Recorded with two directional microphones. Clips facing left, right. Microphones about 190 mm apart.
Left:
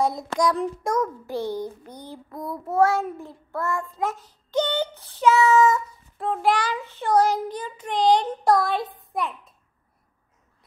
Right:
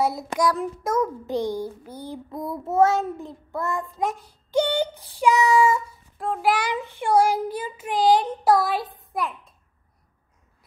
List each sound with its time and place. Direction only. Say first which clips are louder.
0.0 s child singing: even; 5° right (ahead or behind)
1.2 s child singing: right 2 dB; 15° right (ahead or behind)
2.3 s child singing: right 1 dB; 25° right (ahead or behind)
6.1 s child singing: even; centre (ahead or behind)
6.7 s child singing: right 1 dB; 15° right (ahead or behind)
8.9 s a child's voice: even; centre (ahead or behind)